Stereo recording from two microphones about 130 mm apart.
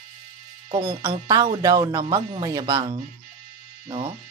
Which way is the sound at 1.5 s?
30° right (ahead or behind).